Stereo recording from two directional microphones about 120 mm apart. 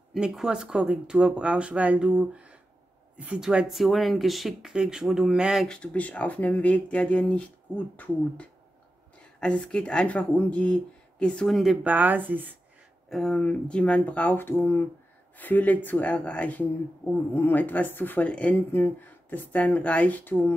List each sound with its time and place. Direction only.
0.1 s speech: 5° right (ahead or behind)
5.7 s speech: 10° left (ahead or behind)
11.9 s speech: 15° right (ahead or behind)
13.1 s speech: 5° left (ahead or behind)